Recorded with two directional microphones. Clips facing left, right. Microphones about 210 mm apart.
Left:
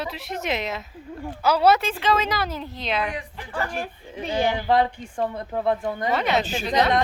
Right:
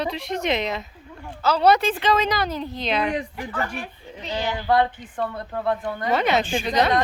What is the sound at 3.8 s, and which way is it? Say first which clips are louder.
Speech: left 4 dB; 50° left (ahead or behind).